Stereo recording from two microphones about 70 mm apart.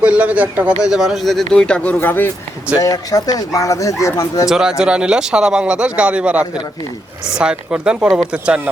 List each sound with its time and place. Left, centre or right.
0.0 s a man's voice: centre
0.8 s speech: centre
2.0 s speech: left
2.7 s speech: left
4.4 s speech: centre